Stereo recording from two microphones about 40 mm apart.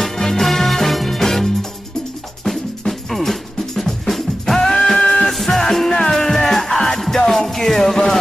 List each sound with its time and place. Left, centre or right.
0.0 s music: centre
4.9 s music: centre
5.3 s music: centre